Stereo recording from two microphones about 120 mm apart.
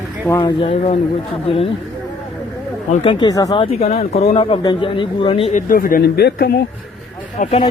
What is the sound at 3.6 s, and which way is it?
Speech, 60° left (ahead or behind).